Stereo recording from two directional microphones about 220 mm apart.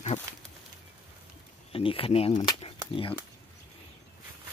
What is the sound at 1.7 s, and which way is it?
Speech, 25° left (ahead or behind).